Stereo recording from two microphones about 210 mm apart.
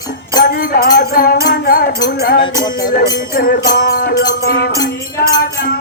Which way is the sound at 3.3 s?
45° left (ahead or behind).